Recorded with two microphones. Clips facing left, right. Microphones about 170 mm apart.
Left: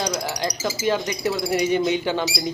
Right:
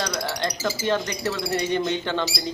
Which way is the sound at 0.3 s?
10° left (ahead or behind).